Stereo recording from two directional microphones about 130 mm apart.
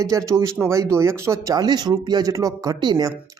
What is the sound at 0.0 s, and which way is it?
Speech, 25° right (ahead or behind).